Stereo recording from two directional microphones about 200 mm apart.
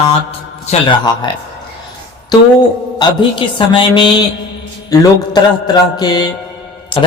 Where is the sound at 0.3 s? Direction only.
25° left (ahead or behind).